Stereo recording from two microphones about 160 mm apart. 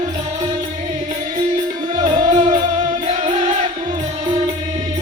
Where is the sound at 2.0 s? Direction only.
50° right (ahead or behind).